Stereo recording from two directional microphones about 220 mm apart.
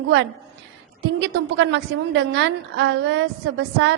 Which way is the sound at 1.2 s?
55° right (ahead or behind).